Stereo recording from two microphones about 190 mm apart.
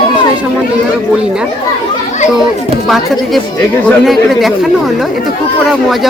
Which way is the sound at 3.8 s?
Centre (ahead or behind).